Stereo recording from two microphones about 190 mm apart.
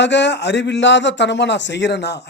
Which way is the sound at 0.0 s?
65° left (ahead or behind).